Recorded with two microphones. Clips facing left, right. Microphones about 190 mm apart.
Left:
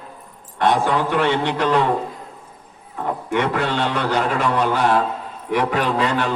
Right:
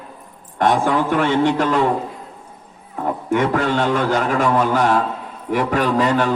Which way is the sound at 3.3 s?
45° right (ahead or behind).